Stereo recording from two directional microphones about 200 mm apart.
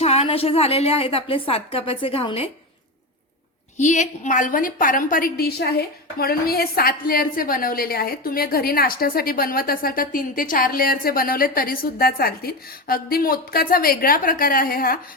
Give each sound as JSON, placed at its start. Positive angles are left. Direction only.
{"t": 0.0, "sound": "a woman's voice", "side_deg": 30}
{"t": 3.8, "sound": "a woman's voice", "side_deg": 35}